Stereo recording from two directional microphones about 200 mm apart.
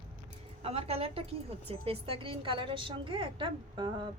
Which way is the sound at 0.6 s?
30° right (ahead or behind).